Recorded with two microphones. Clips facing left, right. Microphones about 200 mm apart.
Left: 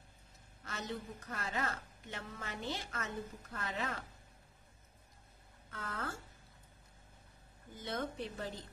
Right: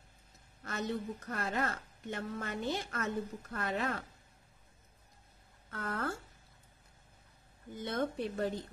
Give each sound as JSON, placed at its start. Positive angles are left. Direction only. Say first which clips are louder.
{"t": 0.7, "sound": "a woman's voice", "louder": "right 6 dB", "side_deg": -55}
{"t": 5.7, "sound": "a woman's voice", "louder": "right 6 dB", "side_deg": -60}
{"t": 7.8, "sound": "a woman's voice", "louder": "right 5 dB", "side_deg": -55}